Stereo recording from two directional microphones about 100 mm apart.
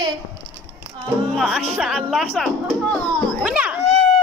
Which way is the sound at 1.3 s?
5° right (ahead or behind).